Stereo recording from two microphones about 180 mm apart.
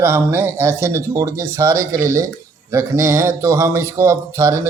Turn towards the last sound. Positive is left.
turn(degrees=-15)  # may be behind; listen again after turning